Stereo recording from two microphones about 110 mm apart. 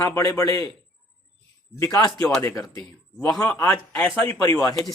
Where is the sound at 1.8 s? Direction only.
25° left (ahead or behind).